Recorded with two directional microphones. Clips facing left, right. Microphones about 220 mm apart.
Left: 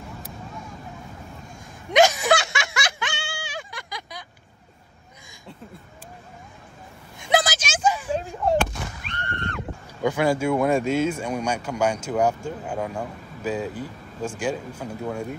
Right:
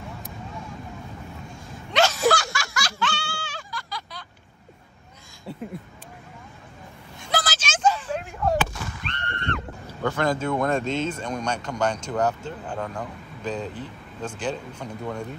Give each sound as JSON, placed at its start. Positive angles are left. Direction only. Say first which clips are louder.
{"t": 1.9, "sound": "snicker", "louder": "left 3 dB", "side_deg": 15}
{"t": 7.2, "sound": "a sound", "louder": "left 6 dB", "side_deg": 15}
{"t": 10.0, "sound": "speech", "louder": "left 3 dB", "side_deg": 10}